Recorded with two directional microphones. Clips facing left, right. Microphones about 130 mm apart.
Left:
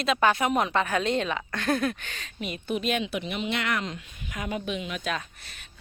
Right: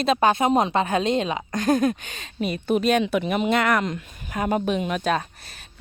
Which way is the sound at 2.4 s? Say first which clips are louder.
Right 8 dB; 40° right (ahead or behind).